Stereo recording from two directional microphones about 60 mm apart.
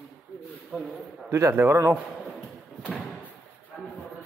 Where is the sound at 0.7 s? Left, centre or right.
Centre.